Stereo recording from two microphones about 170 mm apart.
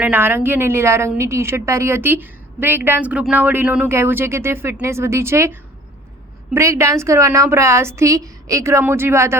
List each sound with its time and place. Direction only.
0.0 s a woman's voice: 10° right (ahead or behind)